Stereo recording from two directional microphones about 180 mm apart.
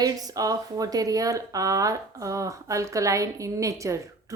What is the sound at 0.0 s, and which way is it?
Speech, 20° right (ahead or behind).